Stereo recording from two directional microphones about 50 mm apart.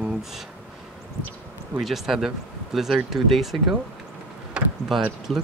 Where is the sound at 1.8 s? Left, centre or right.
Centre.